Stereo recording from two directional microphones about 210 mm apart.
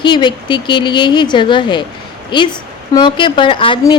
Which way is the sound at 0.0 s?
20° left (ahead or behind).